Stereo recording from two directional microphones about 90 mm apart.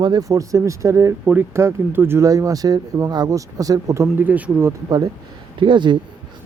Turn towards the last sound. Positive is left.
turn(degrees=-60)  # may be behind; listen again after turning